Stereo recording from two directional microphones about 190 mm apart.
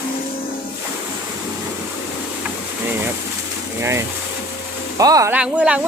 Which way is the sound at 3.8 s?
15° right (ahead or behind).